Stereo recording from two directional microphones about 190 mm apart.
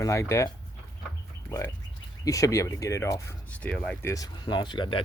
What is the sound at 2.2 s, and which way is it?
Speech, 15° left (ahead or behind).